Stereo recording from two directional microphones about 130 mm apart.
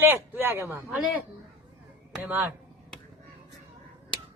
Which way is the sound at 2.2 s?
15° right (ahead or behind).